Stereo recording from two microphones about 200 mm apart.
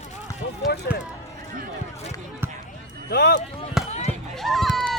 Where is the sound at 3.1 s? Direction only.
55° left (ahead or behind).